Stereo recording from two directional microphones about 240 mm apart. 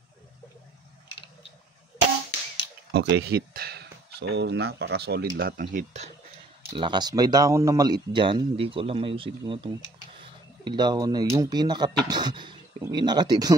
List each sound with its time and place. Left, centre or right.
2.9 s speech: right
6.7 s speech: centre